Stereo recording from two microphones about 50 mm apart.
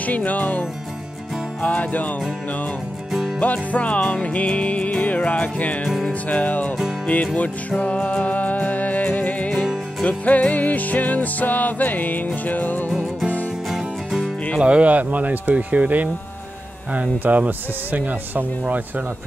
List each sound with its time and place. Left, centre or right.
0.0 s music: left
3.1 s music: centre
3.3 s music: left
14.6 s speech: right
17.2 s speech: right